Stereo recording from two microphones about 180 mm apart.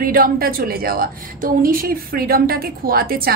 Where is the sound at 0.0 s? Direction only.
55° right (ahead or behind).